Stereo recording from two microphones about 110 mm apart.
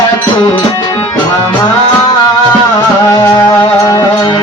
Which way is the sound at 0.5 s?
45° left (ahead or behind).